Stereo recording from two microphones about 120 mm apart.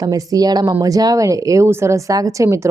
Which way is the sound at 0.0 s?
30° right (ahead or behind).